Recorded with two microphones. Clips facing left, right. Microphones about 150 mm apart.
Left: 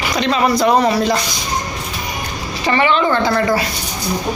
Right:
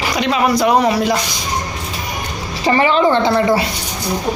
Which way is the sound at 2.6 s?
35° right (ahead or behind).